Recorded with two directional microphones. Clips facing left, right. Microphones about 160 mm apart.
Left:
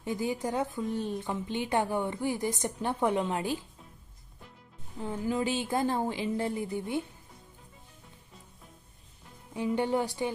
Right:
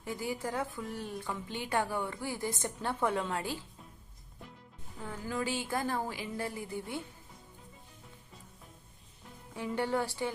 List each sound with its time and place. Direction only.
0.0 s speech: 20° left (ahead or behind)
4.9 s speech: 20° left (ahead or behind)
9.6 s speech: 20° left (ahead or behind)